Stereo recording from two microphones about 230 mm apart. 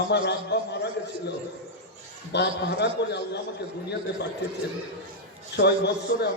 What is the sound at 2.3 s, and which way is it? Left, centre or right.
A man's voice, left.